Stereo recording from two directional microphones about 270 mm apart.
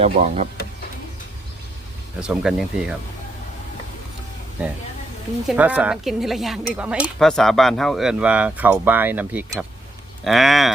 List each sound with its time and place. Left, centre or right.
0.0 s speech: right
2.2 s speech: centre
5.5 s speech: centre